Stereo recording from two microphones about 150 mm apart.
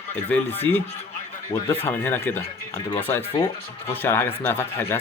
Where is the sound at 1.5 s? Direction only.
25° left (ahead or behind).